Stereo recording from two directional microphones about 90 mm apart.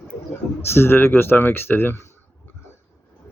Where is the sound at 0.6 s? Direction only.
25° left (ahead or behind).